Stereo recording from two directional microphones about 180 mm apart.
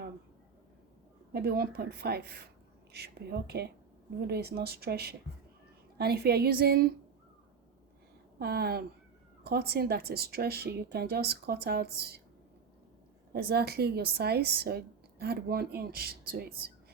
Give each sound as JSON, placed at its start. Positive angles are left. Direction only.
{"t": 1.3, "sound": "a woman's voice", "side_deg": -60}
{"t": 8.4, "sound": "a woman's voice", "side_deg": -60}
{"t": 13.3, "sound": "a woman's voice", "side_deg": -60}